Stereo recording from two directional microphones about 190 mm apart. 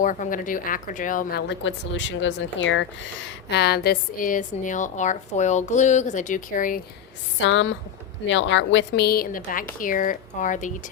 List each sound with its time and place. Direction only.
0.0 s a woman's voice: 45° left (ahead or behind); by 2.8 s 80° left
3.5 s a woman's voice: 60° left (ahead or behind)
7.3 s a woman's voice: 80° left; by 10.7 s 40° left (ahead or behind)